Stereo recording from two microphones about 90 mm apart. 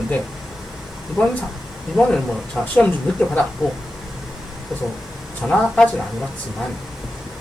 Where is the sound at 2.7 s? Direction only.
15° left (ahead or behind).